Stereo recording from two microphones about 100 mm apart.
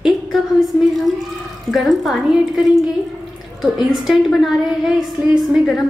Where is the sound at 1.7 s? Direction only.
Centre (ahead or behind).